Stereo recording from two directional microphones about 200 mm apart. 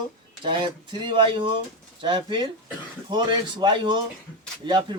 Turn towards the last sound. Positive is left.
turn(degrees=-20)  # may be behind; listen again after turning